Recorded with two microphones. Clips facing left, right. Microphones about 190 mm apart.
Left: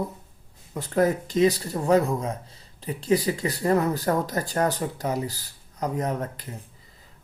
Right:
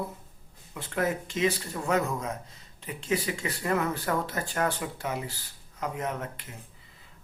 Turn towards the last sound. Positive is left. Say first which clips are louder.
# left 5 dB
turn(degrees=35)  # may be behind; listen again after turning